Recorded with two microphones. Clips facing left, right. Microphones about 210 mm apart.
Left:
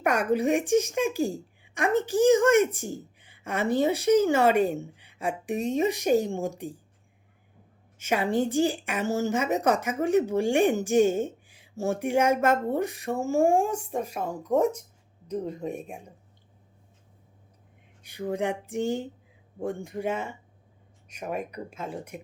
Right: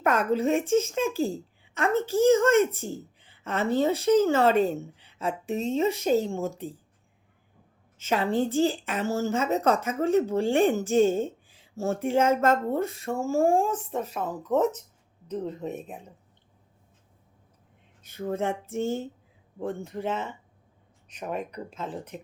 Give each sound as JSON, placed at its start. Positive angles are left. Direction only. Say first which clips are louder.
{"t": 0.0, "sound": "a woman's voice", "louder": "even", "side_deg": 15}
{"t": 7.9, "sound": "a woman's voice", "louder": "even", "side_deg": 15}
{"t": 18.0, "sound": "a woman's voice", "louder": "even", "side_deg": 15}